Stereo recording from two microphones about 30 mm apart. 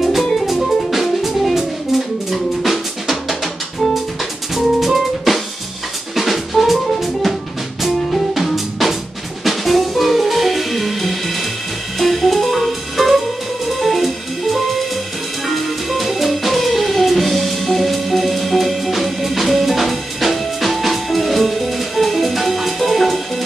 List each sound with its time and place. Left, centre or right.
0.0 s music: centre
2.3 s drum: centre
4.6 s drum kit: centre
7.8 s music: centre